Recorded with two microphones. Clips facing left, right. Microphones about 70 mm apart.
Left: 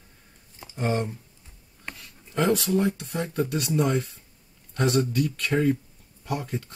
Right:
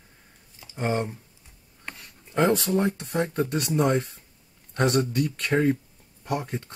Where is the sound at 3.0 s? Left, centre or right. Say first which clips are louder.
Right 2 dB; right.